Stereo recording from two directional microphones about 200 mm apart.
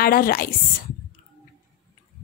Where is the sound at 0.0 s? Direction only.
50° left (ahead or behind).